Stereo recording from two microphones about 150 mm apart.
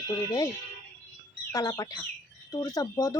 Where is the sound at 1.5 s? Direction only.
25° left (ahead or behind).